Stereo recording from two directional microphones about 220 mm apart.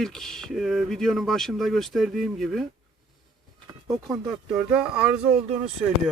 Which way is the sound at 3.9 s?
15° right (ahead or behind).